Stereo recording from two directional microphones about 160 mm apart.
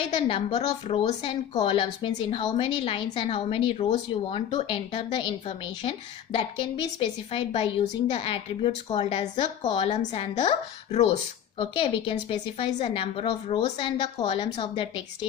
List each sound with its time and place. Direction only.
0.3 s a woman's voice: 40° left (ahead or behind)